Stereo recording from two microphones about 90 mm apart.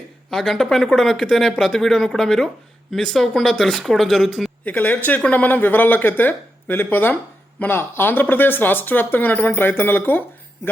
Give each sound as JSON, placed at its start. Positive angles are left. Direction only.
{"t": 0.3, "sound": "speech", "side_deg": 5}
{"t": 4.6, "sound": "speech", "side_deg": 20}